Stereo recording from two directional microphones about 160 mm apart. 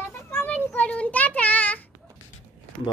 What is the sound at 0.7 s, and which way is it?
Child singing, 10° left (ahead or behind).